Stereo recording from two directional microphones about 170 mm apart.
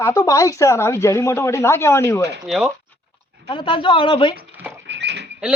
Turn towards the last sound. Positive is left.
turn(degrees=-80)